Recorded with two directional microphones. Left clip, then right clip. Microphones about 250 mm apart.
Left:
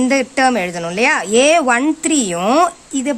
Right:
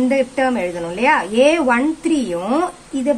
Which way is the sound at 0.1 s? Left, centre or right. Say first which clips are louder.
Left 3 dB; left.